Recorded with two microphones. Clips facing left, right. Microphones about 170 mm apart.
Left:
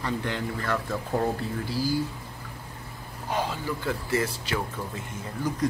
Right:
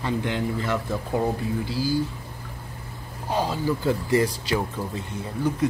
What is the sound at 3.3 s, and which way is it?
Speech, 35° right (ahead or behind).